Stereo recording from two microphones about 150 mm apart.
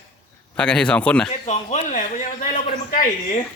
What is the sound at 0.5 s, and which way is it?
Speech, 5° left (ahead or behind).